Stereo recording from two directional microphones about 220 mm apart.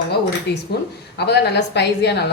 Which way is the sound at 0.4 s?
50° left (ahead or behind).